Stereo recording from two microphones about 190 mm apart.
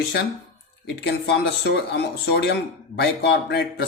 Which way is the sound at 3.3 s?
60° left (ahead or behind).